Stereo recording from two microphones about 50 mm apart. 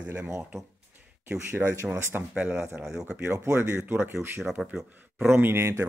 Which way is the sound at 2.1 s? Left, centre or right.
Right.